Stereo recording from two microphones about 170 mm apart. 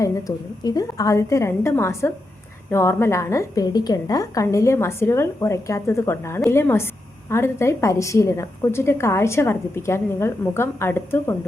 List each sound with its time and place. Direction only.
0.0 s a woman's voice: 20° left (ahead or behind)